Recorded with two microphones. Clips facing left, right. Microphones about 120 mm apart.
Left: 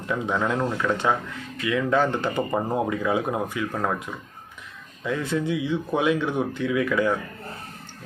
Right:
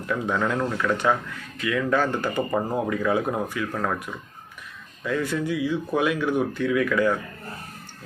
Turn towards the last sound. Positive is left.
turn(degrees=20)  # may be behind; listen again after turning